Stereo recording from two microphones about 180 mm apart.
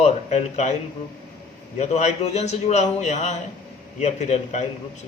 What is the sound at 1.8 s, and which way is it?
A man's voice, 40° left (ahead or behind).